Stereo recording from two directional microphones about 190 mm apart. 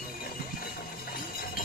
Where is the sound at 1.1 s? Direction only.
50° left (ahead or behind).